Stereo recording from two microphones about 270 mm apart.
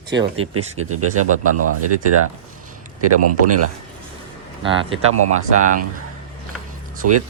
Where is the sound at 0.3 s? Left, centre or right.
Right.